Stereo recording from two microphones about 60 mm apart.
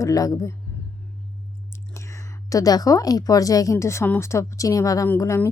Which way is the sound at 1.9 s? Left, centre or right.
Left.